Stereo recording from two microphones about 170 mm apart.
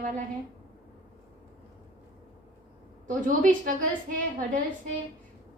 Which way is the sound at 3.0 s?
50° right (ahead or behind).